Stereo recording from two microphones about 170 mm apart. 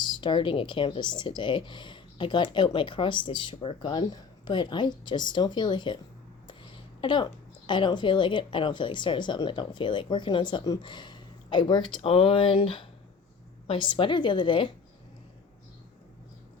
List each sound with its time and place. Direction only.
0.0 s speech: 30° left (ahead or behind)
7.0 s speech: 25° left (ahead or behind)